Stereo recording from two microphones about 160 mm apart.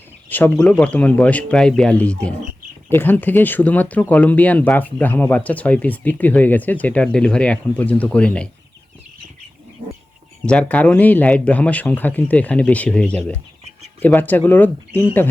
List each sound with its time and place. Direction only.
0.3 s speech: 10° left (ahead or behind)
10.4 s speech: 5° left (ahead or behind)